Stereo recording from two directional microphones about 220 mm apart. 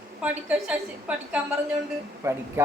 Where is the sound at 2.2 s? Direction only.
10° right (ahead or behind).